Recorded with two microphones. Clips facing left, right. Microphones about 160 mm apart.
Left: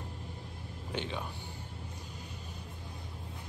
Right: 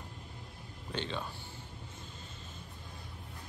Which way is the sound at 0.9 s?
15° left (ahead or behind).